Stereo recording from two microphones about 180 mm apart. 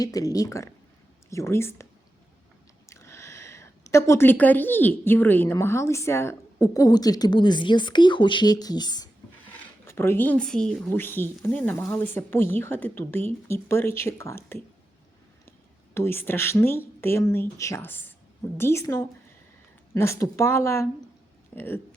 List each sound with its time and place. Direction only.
0.0 s speech: 20° left (ahead or behind)
2.9 s speech: 15° left (ahead or behind)
16.0 s speech: 10° left (ahead or behind)